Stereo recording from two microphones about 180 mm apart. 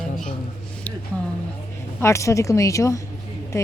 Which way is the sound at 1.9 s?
15° left (ahead or behind).